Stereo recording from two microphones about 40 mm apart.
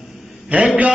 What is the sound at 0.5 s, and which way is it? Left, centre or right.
Speech, right.